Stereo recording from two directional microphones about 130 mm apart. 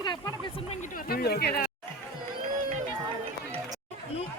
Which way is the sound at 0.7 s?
75° left (ahead or behind).